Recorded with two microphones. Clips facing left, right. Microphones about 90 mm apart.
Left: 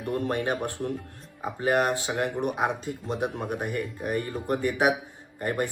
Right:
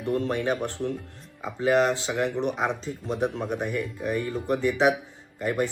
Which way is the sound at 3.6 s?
50° left (ahead or behind).